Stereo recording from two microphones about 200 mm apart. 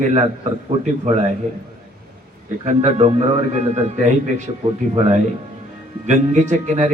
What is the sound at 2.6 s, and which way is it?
A man's voice, 35° right (ahead or behind).